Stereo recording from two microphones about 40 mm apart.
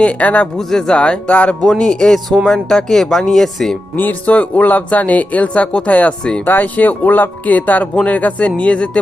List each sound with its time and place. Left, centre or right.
0.0 s speech: left
0.7 s speech: centre
0.9 s speech: left
1.3 s speech: left
1.8 s speech: centre
3.9 s speech: left
4.3 s speech: left
6.4 s speech: left